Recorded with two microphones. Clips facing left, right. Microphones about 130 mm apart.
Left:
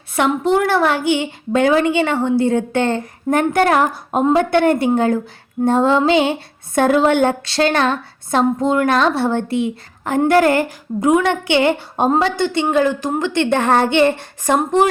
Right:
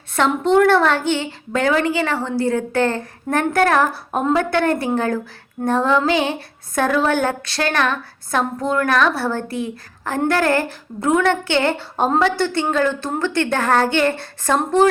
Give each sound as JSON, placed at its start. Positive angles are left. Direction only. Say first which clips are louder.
{"t": 0.2, "sound": "a woman's voice", "louder": "right 1 dB", "side_deg": 5}